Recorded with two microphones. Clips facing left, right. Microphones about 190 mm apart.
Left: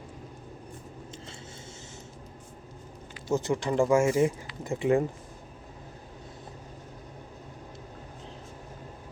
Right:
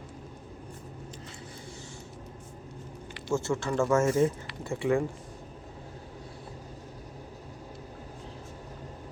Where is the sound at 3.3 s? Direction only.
20° left (ahead or behind).